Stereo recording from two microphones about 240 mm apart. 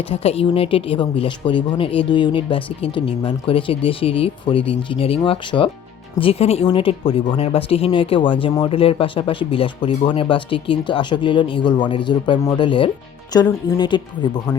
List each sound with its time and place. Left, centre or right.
0.0 s speech: left